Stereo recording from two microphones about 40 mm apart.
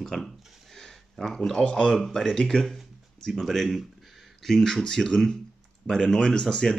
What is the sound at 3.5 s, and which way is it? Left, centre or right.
Speech, centre.